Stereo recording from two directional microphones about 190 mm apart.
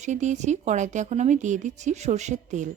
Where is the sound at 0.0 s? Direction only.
40° right (ahead or behind).